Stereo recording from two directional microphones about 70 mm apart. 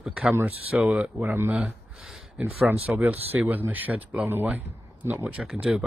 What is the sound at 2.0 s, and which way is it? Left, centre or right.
Speech, centre.